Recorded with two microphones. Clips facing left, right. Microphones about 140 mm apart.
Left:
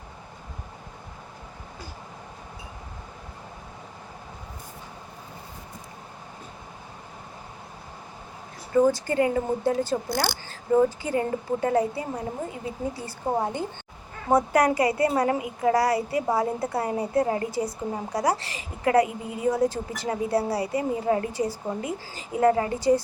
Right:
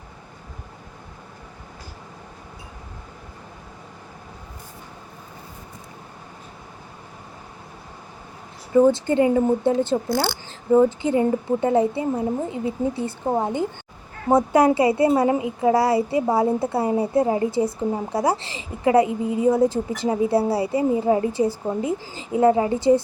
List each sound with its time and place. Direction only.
8.7 s a woman's voice: 25° right (ahead or behind)